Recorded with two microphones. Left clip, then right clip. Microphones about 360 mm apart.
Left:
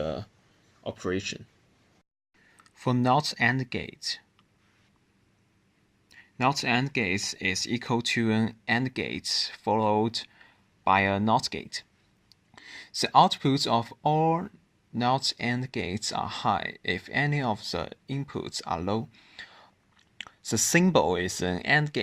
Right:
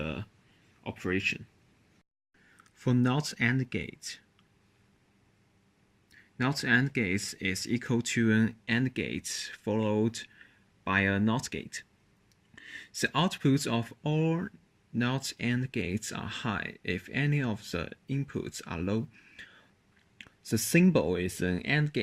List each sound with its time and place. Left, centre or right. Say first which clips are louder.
0.9 s speech: even; centre
2.6 s speech: left 5 dB; centre
6.4 s speech: left 2 dB; centre